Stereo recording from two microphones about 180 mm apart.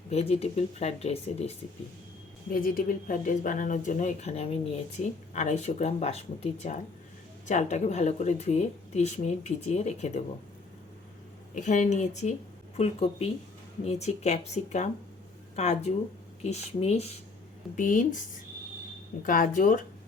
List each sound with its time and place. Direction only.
0.1 s speech: 35° left (ahead or behind)
2.5 s speech: 50° left (ahead or behind)
11.5 s speech: 45° left (ahead or behind)
19.2 s speech: 50° left (ahead or behind)